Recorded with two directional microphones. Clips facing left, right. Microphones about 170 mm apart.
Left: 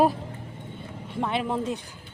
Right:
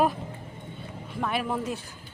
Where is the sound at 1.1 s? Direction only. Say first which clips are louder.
Left 2 dB; 25° left (ahead or behind).